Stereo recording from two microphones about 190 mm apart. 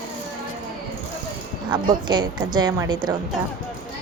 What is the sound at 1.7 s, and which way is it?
A woman's voice, 25° right (ahead or behind).